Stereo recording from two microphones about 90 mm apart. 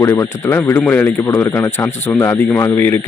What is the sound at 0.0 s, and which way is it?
Speech, 30° left (ahead or behind).